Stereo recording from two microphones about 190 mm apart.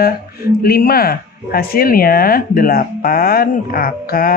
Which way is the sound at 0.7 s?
50° left (ahead or behind).